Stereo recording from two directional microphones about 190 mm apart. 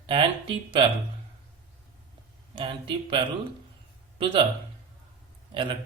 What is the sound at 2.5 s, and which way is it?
Speech, 25° right (ahead or behind).